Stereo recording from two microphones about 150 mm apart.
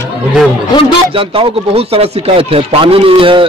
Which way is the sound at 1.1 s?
35° right (ahead or behind).